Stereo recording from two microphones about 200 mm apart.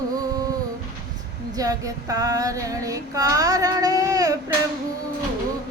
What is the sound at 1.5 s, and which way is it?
Female singing, 15° right (ahead or behind).